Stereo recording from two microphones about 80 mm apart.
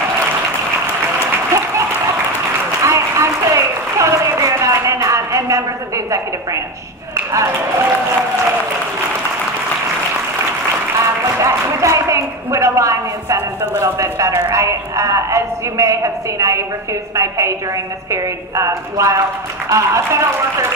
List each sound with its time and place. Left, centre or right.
2.8 s a sound: right
7.3 s a woman's voice: right
11.3 s a woman's voice: right